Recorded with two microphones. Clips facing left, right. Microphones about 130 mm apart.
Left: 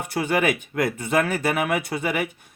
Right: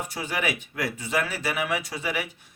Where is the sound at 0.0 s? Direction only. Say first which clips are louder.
Left 7 dB; 60° left (ahead or behind).